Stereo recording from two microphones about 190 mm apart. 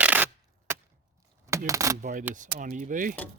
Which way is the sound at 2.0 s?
40° right (ahead or behind).